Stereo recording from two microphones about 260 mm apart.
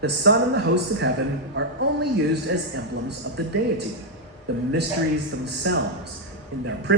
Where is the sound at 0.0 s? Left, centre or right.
Right.